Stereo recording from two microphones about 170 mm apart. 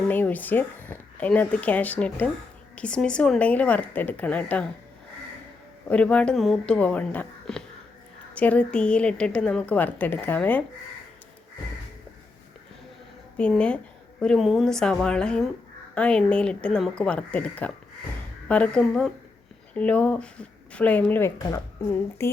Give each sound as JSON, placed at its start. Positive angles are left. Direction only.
{"t": 0.1, "sound": "a woman's voice", "side_deg": 10}
{"t": 5.9, "sound": "a woman's voice", "side_deg": 5}
{"t": 13.3, "sound": "a woman's voice", "side_deg": 5}